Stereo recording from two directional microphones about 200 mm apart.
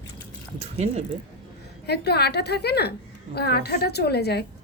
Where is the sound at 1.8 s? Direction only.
55° left (ahead or behind).